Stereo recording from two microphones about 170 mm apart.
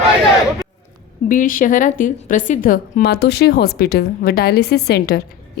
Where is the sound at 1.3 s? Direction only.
50° left (ahead or behind).